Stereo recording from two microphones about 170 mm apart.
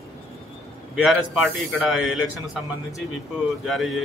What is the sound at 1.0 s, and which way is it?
A man's voice, centre (ahead or behind).